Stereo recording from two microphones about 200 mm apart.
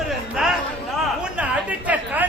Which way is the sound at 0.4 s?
5° right (ahead or behind).